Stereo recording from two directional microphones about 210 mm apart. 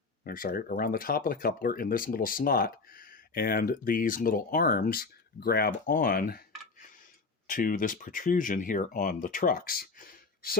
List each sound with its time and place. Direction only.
0.3 s speech: 45° left (ahead or behind)
7.4 s speech: 40° left (ahead or behind)